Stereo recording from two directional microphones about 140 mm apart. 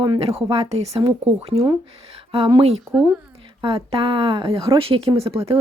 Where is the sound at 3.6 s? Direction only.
40° right (ahead or behind).